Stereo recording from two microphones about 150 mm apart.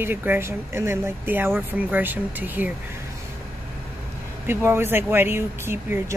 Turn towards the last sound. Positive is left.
turn(degrees=-15)  # may be behind; listen again after turning